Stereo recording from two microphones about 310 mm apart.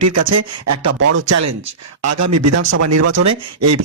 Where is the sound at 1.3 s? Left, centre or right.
Right.